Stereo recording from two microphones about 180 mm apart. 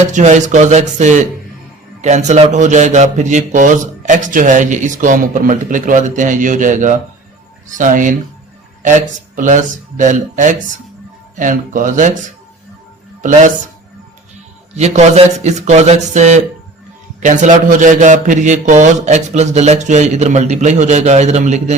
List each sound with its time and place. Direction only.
0.0 s a man's voice: 40° right (ahead or behind)
14.8 s a man's voice: 35° right (ahead or behind)